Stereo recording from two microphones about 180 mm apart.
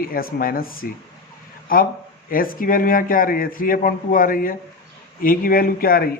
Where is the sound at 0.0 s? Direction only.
55° left (ahead or behind).